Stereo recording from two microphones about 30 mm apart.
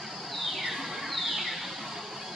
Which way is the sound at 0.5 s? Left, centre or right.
Centre.